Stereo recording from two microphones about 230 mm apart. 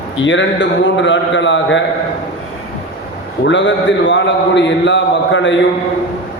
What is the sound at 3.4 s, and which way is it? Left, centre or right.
A man's voice, left.